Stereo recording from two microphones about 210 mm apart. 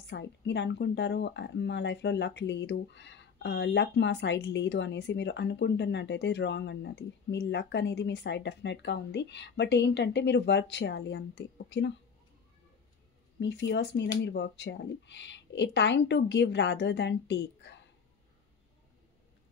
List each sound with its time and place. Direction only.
0.0 s speech: 55° left (ahead or behind)
13.4 s speech: 55° left (ahead or behind)